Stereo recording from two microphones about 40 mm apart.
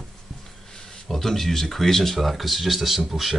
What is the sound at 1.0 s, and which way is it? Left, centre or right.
Speech, centre.